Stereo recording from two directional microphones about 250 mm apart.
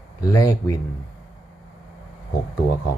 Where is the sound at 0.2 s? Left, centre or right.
Centre.